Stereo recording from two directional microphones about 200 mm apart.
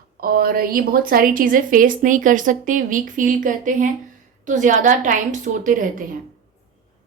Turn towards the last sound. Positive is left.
turn(degrees=-40)  # may be behind; listen again after turning